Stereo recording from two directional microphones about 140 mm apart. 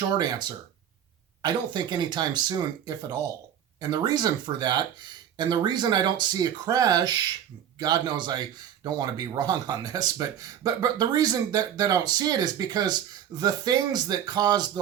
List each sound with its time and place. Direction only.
0.2 s speech: 30° right (ahead or behind)